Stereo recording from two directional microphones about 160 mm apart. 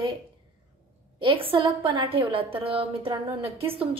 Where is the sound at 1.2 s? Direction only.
35° right (ahead or behind).